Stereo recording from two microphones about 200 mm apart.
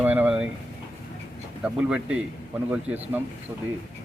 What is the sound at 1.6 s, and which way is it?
A man's voice, 5° right (ahead or behind).